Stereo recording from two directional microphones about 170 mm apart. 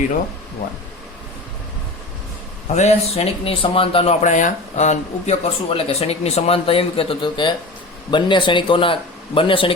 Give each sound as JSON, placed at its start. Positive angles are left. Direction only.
{"t": 2.7, "sound": "a man's voice", "side_deg": 40}